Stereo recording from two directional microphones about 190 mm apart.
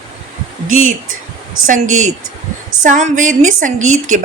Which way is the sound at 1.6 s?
90° right.